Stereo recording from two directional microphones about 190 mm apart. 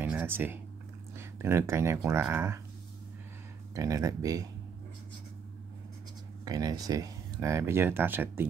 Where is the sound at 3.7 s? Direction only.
15° right (ahead or behind).